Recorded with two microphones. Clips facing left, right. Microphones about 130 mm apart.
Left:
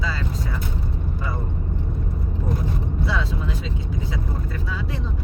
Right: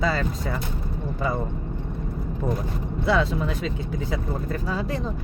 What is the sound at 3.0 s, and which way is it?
Speech, 55° right (ahead or behind).